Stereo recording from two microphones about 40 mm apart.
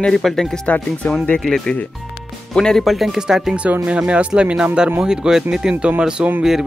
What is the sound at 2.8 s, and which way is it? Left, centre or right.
Speech, centre.